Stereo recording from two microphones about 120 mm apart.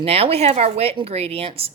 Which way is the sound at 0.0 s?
55° right (ahead or behind).